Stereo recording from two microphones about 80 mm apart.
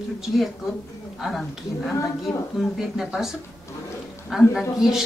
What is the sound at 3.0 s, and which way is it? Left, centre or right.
Speech, centre.